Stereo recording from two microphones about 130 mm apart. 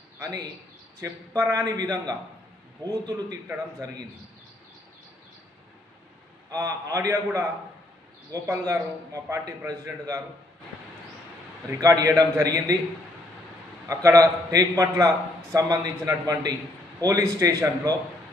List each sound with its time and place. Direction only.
0.2 s a man's voice: 30° right (ahead or behind)
6.5 s a man's voice: 25° right (ahead or behind)
11.8 s a man's voice: 25° right (ahead or behind)
13.8 s a man's voice: 25° right (ahead or behind)